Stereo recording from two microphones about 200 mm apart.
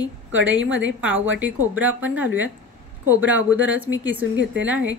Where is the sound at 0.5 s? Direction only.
70° right (ahead or behind).